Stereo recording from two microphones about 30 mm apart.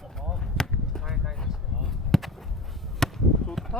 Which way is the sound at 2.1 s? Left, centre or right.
Centre.